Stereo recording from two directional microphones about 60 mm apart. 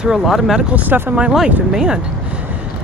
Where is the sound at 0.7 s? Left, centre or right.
Right.